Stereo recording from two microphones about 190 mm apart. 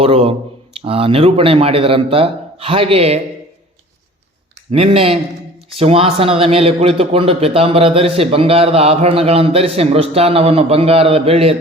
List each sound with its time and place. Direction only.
0.0 s a man's voice: 30° right (ahead or behind)
4.7 s a man's voice: 30° right (ahead or behind)